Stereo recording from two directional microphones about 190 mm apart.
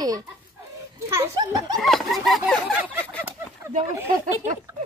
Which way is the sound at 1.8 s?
Centre (ahead or behind).